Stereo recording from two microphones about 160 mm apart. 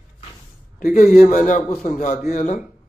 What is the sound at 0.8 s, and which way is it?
A man's voice, 55° left (ahead or behind).